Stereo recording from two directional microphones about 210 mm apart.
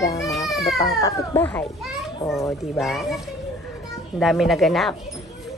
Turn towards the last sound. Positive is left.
turn(degrees=0)  # may be behind; listen again after turning